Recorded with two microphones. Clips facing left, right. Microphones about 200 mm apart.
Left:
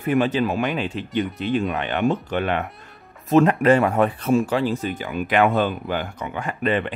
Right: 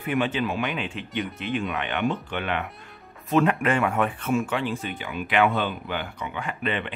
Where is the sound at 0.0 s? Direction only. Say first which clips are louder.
Left 5 dB; 40° left (ahead or behind).